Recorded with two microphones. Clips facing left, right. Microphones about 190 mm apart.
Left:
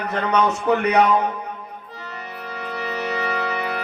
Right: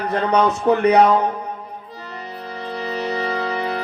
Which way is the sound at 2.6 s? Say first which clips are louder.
Right 2 dB; 35° right (ahead or behind).